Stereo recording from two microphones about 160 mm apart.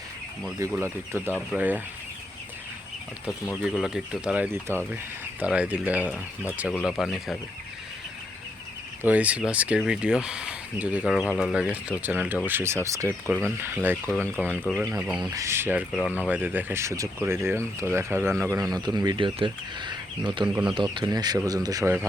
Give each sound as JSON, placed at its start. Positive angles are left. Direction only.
{"t": 0.7, "sound": "speech", "side_deg": -15}
{"t": 3.6, "sound": "speech", "side_deg": 0}
{"t": 9.0, "sound": "speech", "side_deg": -10}
{"t": 14.1, "sound": "speech", "side_deg": 10}
{"t": 15.2, "sound": "speech", "side_deg": -20}
{"t": 20.5, "sound": "speech", "side_deg": -5}
{"t": 20.7, "sound": "speech", "side_deg": -30}